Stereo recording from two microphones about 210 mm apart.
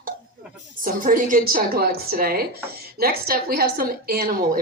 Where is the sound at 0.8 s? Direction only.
40° right (ahead or behind).